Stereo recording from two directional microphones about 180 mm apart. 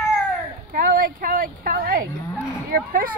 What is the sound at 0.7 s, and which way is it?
Speech, 55° right (ahead or behind).